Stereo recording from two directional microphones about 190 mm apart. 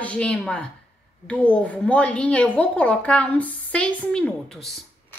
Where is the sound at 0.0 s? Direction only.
5° left (ahead or behind).